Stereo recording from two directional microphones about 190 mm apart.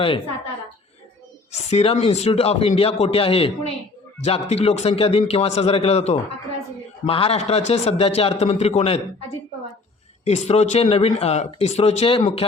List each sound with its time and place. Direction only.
1.7 s speech: 30° left (ahead or behind)
10.2 s speech: 35° left (ahead or behind)